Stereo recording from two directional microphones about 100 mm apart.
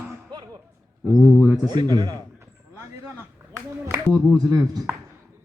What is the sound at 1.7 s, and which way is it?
Speech, 45° right (ahead or behind).